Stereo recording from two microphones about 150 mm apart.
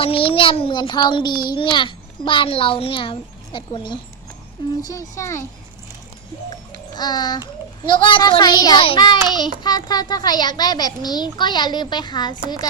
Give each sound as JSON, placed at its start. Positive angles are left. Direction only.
{"t": 0.0, "sound": "a child's voice", "side_deg": 35}
{"t": 6.5, "sound": "music", "side_deg": 25}
{"t": 8.0, "sound": "a child's voice", "side_deg": 30}